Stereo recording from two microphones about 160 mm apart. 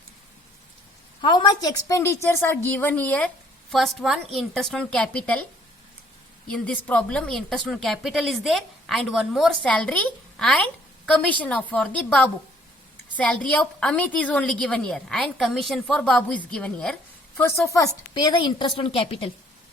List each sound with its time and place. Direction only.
1.2 s a woman's voice: 30° left (ahead or behind); by 5.5 s 10° left (ahead or behind)
6.5 s a woman's voice: 10° left (ahead or behind)
17.7 s a woman's voice: 25° left (ahead or behind)